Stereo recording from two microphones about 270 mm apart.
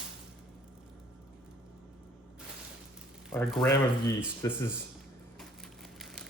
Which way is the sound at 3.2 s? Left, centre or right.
Centre.